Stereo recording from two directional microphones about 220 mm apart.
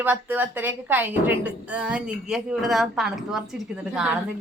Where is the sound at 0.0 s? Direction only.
10° right (ahead or behind).